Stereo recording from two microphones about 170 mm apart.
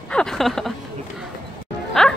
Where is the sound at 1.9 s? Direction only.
5° left (ahead or behind).